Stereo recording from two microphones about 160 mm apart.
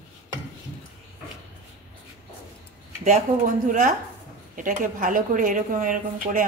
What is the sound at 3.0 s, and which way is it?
A woman's voice, 50° right (ahead or behind).